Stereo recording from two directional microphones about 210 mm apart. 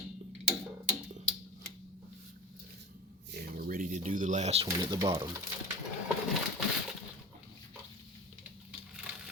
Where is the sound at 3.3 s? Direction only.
45° right (ahead or behind); by 4.7 s 30° right (ahead or behind).